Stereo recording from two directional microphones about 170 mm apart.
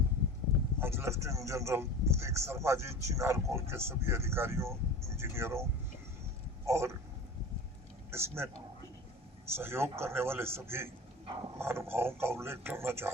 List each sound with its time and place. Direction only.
0.8 s speech: 15° right (ahead or behind)
6.7 s speech: 15° right (ahead or behind)
8.1 s speech: 15° right (ahead or behind)
9.6 s speech: 15° right (ahead or behind)